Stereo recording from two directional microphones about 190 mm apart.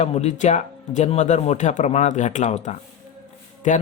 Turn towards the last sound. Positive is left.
turn(degrees=40)  # may be behind; listen again after turning